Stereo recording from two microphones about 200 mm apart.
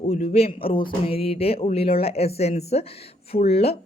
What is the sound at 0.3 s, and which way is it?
Speech, 30° left (ahead or behind).